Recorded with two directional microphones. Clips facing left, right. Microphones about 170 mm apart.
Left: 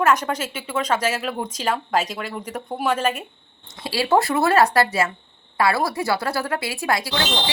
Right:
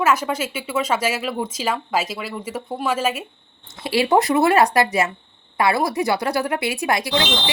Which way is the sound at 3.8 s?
20° right (ahead or behind).